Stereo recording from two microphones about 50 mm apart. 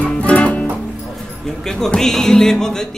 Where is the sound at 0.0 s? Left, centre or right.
Left.